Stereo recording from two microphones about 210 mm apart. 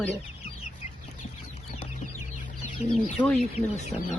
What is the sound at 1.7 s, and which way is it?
Chicken, 35° left (ahead or behind).